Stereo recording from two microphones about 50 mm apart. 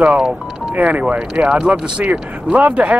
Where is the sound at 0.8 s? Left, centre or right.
Right.